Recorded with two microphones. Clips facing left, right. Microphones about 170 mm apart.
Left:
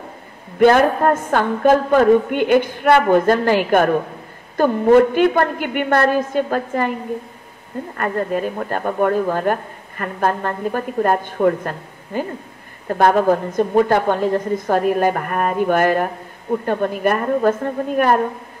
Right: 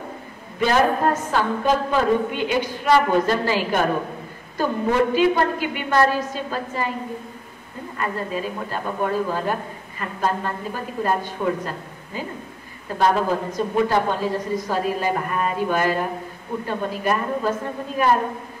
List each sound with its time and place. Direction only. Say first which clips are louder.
0.6 s speech: left 6 dB; 55° left (ahead or behind)
8.0 s speech: left 5 dB; 55° left (ahead or behind)